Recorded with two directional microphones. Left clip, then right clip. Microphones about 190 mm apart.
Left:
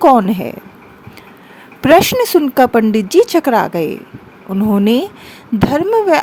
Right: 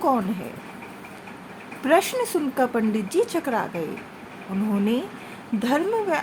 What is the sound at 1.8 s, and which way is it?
A woman's voice, 55° left (ahead or behind).